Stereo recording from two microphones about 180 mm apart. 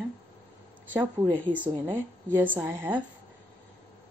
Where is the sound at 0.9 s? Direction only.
15° right (ahead or behind).